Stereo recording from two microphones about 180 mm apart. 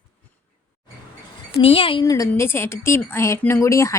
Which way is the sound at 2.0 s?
20° left (ahead or behind).